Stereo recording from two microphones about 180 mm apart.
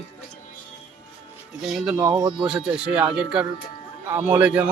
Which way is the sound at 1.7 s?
Centre (ahead or behind).